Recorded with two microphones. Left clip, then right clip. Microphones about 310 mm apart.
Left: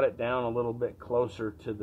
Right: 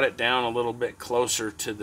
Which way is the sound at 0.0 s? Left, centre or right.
Right.